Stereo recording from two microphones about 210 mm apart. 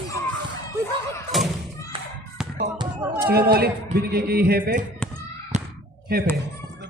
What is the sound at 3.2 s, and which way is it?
A man's voice, 45° right (ahead or behind).